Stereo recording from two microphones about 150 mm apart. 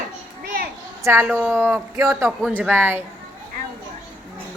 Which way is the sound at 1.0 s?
15° right (ahead or behind).